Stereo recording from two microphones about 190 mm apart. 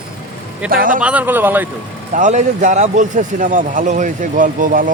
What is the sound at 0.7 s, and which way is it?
Speech, 45° right (ahead or behind).